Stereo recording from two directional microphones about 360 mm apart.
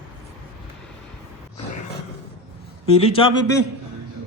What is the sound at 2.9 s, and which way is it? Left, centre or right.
Speech, centre.